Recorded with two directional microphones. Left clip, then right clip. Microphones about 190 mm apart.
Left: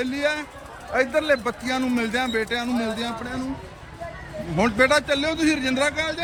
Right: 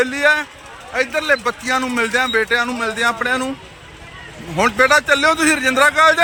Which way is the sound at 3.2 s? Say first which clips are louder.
Right 13 dB; 30° right (ahead or behind).